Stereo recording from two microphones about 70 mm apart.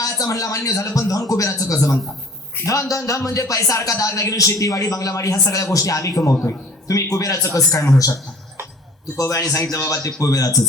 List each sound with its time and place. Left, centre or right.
0.0 s speech: left
9.1 s a man's voice: left